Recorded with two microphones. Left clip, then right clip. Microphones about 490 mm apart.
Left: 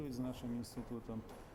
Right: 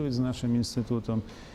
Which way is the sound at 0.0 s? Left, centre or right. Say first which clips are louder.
Right 13 dB; right.